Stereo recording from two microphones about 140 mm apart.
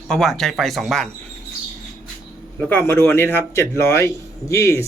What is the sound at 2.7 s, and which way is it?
A man's voice, 15° left (ahead or behind).